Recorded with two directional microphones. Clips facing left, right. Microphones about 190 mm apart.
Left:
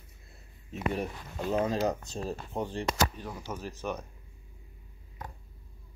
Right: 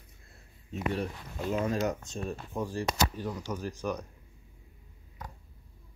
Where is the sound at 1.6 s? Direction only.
30° left (ahead or behind).